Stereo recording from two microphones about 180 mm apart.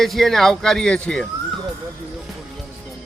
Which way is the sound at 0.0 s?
Centre (ahead or behind).